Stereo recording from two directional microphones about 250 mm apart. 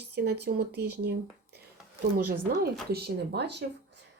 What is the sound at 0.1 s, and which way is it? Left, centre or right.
Speech, right.